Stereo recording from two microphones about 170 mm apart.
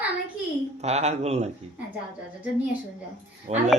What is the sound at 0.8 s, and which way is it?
Speech, 40° right (ahead or behind).